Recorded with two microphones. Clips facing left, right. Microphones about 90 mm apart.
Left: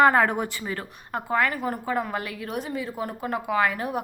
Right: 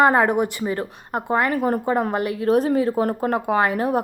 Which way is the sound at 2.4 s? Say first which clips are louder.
Right 12 dB; 40° right (ahead or behind).